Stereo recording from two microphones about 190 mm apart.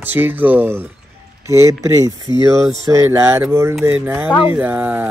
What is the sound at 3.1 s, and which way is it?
Speech, 15° right (ahead or behind).